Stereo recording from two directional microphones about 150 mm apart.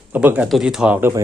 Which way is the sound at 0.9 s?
15° right (ahead or behind).